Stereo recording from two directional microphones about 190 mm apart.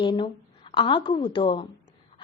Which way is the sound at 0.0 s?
25° left (ahead or behind).